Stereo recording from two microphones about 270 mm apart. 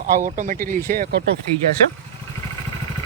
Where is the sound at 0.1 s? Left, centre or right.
Right.